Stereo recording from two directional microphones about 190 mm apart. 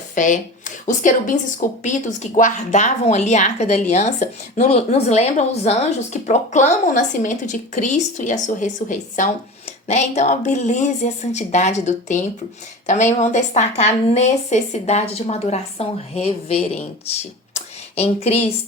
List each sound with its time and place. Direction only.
0.1 s a woman's voice: 40° left (ahead or behind)